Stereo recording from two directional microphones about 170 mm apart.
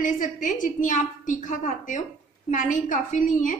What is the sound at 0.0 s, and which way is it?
A woman's voice, 50° left (ahead or behind).